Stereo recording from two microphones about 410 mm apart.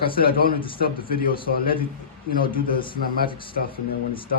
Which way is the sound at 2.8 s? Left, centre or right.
Centre.